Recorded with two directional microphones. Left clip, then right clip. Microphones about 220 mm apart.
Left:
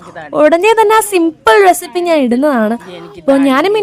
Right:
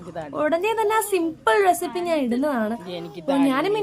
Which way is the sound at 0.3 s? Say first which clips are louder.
Left 14 dB; 40° left (ahead or behind).